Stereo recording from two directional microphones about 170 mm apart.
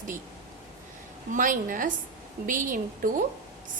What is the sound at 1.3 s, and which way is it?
A woman's voice, 50° right (ahead or behind).